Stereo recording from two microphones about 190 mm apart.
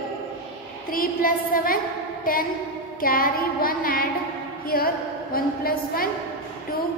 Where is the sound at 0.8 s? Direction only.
50° left (ahead or behind).